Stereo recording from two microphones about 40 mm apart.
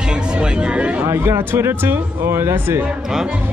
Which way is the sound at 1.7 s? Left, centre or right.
Right.